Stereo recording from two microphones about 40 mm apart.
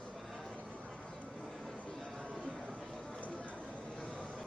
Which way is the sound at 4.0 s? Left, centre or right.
Left.